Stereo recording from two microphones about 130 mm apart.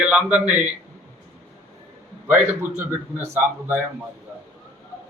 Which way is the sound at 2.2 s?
15° right (ahead or behind).